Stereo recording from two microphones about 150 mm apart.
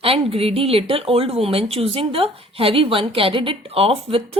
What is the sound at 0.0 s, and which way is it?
Speech, 40° right (ahead or behind).